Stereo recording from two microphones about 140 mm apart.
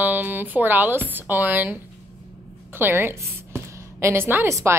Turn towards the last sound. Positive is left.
turn(degrees=-20)  # may be behind; listen again after turning